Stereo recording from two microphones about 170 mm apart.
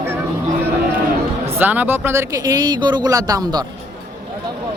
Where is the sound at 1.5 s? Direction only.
10° right (ahead or behind).